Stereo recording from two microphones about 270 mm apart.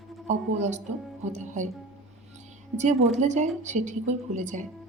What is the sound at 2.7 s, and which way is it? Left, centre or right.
Speech, right.